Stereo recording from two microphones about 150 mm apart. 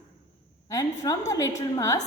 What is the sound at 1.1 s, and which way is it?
Speech, 25° left (ahead or behind).